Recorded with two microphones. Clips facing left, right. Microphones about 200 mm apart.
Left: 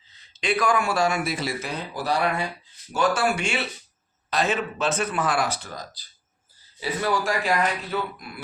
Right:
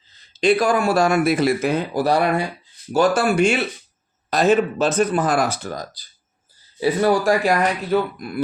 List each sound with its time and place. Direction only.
0.3 s speech: 35° right (ahead or behind); by 1.8 s 55° right (ahead or behind)
2.9 s speech: 40° right (ahead or behind)